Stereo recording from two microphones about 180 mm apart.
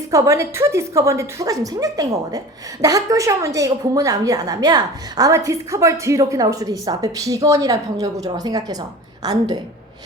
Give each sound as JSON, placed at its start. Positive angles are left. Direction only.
{"t": 0.1, "sound": "a woman's voice", "side_deg": -15}